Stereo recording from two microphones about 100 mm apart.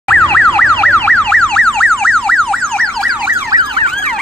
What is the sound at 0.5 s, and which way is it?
Car alarm, 20° left (ahead or behind).